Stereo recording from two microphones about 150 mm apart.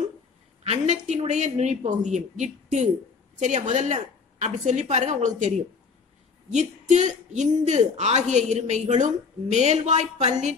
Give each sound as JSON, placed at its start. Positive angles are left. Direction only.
{"t": 0.7, "sound": "a woman's voice", "side_deg": -50}
{"t": 6.5, "sound": "a woman's voice", "side_deg": -50}